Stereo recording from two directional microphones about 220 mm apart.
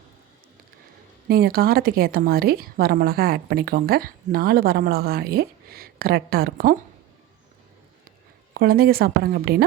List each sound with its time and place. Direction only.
1.3 s a woman's voice: 45° right (ahead or behind)
8.5 s a woman's voice: 45° right (ahead or behind)